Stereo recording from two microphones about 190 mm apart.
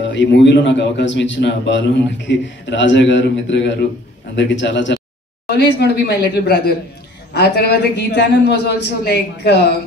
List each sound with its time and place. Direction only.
0.0 s a man's voice: 70° left (ahead or behind)
5.5 s a man's voice: 60° left (ahead or behind)